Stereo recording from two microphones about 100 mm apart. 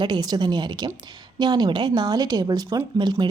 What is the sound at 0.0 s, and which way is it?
Speech, 45° right (ahead or behind).